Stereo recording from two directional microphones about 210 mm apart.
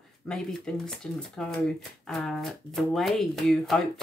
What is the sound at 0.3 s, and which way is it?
Speech, 5° left (ahead or behind).